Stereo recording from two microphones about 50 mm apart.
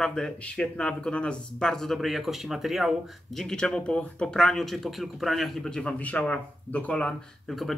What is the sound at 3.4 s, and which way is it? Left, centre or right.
Speech, centre.